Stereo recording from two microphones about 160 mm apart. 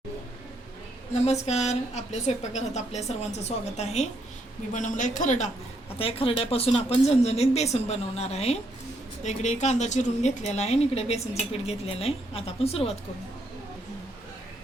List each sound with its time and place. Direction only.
1.1 s a woman's voice: 45° left (ahead or behind)
6.0 s a woman's voice: 35° left (ahead or behind)